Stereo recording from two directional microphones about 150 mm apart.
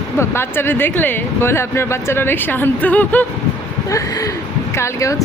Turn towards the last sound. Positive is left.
turn(degrees=20)  # may be behind; listen again after turning